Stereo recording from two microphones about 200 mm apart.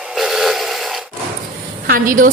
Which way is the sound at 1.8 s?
45° right (ahead or behind).